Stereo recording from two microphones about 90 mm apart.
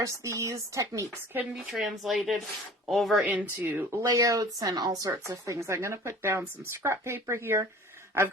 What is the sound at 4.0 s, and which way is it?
Speech, 40° right (ahead or behind).